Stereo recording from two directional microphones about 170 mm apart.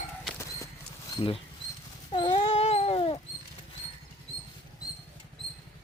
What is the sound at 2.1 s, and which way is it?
Dog, 30° left (ahead or behind).